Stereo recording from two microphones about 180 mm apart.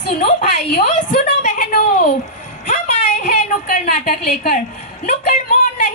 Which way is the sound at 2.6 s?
45° left (ahead or behind).